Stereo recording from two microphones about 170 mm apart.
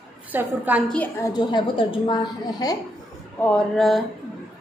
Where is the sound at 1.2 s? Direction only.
25° left (ahead or behind).